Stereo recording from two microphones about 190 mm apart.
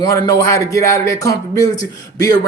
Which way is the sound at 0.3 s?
15° left (ahead or behind).